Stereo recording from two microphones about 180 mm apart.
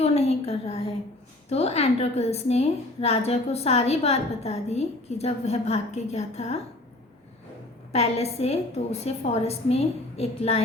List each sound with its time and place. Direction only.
0.0 s a woman's voice: 35° left (ahead or behind)
7.9 s a woman's voice: 35° left (ahead or behind)